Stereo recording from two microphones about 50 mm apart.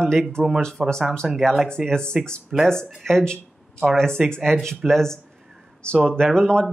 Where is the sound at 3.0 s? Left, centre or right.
Centre.